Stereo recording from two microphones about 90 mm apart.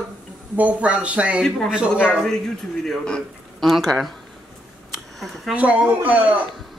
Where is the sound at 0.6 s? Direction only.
15° right (ahead or behind).